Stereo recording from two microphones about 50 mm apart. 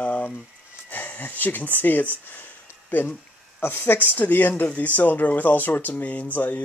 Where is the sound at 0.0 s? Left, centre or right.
Left.